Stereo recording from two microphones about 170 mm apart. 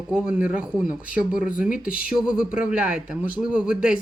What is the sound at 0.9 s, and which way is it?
Speech, 55° left (ahead or behind).